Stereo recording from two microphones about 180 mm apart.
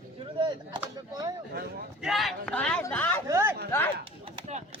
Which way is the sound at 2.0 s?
Centre (ahead or behind).